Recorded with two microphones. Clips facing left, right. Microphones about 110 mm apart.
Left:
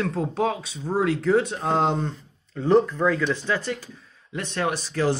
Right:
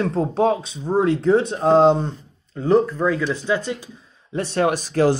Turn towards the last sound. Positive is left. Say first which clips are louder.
# right 6 dB
turn(degrees=-45)  # may be behind; listen again after turning